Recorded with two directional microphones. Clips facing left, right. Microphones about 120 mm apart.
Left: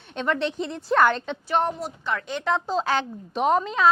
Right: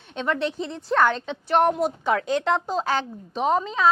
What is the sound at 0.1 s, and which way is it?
A woman's voice, 5° right (ahead or behind).